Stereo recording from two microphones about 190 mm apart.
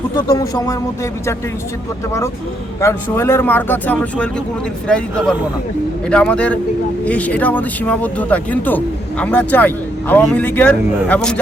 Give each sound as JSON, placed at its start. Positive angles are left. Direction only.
{"t": 0.3, "sound": "speech", "side_deg": 15}
{"t": 2.8, "sound": "a man's voice", "side_deg": 10}